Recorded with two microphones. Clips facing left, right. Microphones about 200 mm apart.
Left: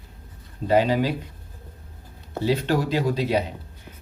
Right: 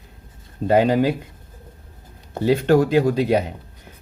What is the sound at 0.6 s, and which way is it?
Speech, 50° right (ahead or behind).